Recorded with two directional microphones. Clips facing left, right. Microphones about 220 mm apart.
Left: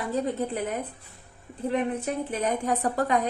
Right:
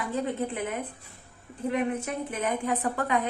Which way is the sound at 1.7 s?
35° left (ahead or behind).